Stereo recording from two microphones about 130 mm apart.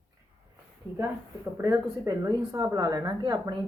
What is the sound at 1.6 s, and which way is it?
Speech, 25° right (ahead or behind).